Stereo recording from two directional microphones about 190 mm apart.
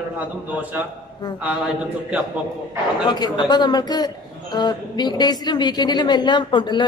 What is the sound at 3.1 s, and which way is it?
A man's voice, 25° left (ahead or behind).